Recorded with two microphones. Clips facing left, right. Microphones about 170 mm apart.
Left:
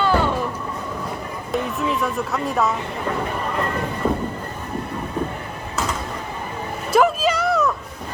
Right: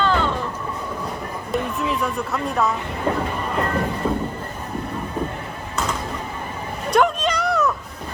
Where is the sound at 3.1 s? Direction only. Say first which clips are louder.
Right 3 dB; 30° right (ahead or behind).